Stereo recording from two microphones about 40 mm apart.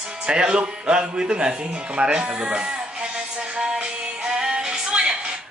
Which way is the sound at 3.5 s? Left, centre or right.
Right.